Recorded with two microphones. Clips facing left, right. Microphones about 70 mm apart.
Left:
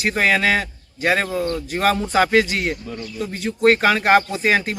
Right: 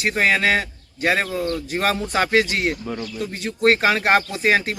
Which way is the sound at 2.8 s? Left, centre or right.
Right.